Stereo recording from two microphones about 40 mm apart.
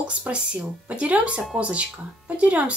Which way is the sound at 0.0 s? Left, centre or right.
Right.